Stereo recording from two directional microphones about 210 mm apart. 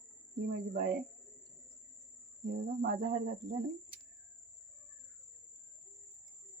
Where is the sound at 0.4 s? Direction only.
45° right (ahead or behind).